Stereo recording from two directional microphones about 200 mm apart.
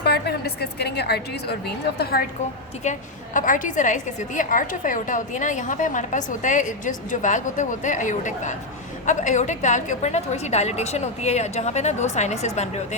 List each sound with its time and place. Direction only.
0.0 s a woman's voice: 55° left (ahead or behind)
2.8 s a woman's voice: 40° left (ahead or behind)